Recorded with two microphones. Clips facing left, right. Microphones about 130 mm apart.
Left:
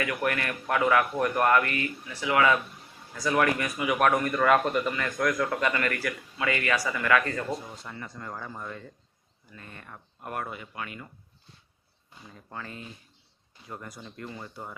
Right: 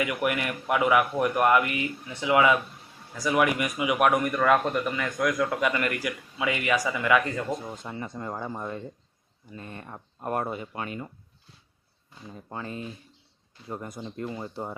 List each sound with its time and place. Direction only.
0.0 s speech: 15° right (ahead or behind)
12.3 s speech: 25° right (ahead or behind)